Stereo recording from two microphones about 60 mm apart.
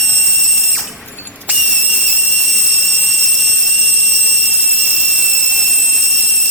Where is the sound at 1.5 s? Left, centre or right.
Centre.